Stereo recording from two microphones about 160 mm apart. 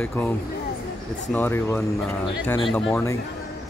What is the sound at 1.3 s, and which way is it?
Speech, 15° left (ahead or behind).